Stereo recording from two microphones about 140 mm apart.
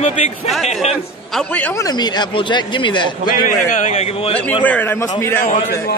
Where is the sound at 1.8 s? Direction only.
30° left (ahead or behind).